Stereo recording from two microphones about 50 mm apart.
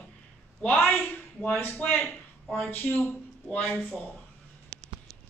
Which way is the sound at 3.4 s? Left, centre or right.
Left.